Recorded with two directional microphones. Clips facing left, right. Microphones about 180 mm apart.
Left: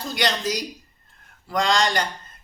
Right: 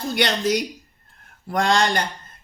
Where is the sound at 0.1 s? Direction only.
60° right (ahead or behind).